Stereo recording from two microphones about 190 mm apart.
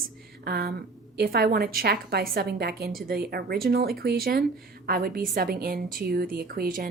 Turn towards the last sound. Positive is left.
turn(degrees=-50)  # may be behind; listen again after turning